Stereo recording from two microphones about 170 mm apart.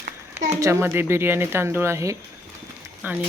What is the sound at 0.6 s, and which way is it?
Speech, 15° right (ahead or behind).